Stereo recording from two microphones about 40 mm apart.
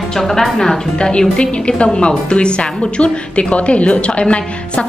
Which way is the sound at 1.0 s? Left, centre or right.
Left.